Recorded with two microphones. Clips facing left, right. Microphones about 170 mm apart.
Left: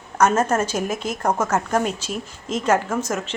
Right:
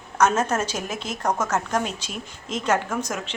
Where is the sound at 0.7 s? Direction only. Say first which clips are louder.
Left 5 dB; 50° left (ahead or behind).